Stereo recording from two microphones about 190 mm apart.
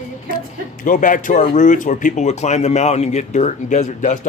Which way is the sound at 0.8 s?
45° left (ahead or behind).